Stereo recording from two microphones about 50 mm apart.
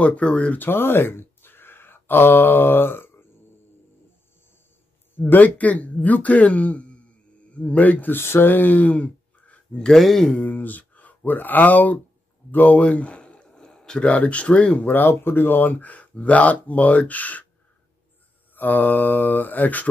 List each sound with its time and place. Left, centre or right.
0.0 s speech: left
0.5 s speech: left
5.2 s speech: left
8.2 s speech: left
9.8 s speech: centre
10.4 s speech: left
12.4 s a sound: left; by 14.0 s centre
14.0 s speech: left
14.9 s speech: left
18.5 s speech: left